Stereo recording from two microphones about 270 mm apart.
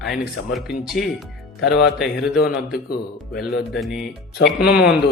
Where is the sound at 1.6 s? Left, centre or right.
Left.